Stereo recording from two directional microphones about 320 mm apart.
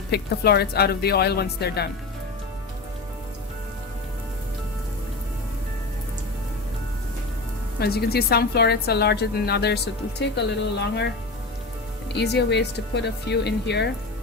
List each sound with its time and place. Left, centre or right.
0.1 s speech: left
7.8 s a woman's voice: left
12.1 s a woman's voice: left